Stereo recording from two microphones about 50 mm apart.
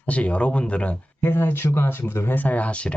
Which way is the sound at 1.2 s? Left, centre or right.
Left.